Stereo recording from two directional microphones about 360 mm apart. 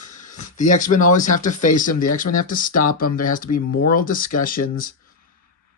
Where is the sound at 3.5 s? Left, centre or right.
Left.